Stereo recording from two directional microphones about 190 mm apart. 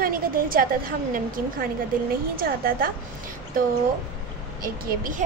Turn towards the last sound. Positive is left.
turn(degrees=-50)  # may be behind; listen again after turning